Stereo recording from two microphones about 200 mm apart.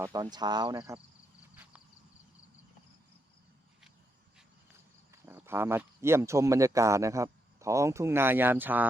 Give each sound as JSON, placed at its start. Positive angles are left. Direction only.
{"t": 0.0, "sound": "speech", "side_deg": -20}
{"t": 5.1, "sound": "speech", "side_deg": -10}